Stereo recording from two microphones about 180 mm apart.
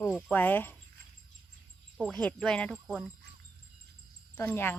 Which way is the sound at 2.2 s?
5° left (ahead or behind).